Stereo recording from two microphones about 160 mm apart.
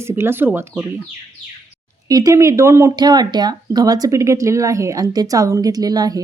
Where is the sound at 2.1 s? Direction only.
20° right (ahead or behind).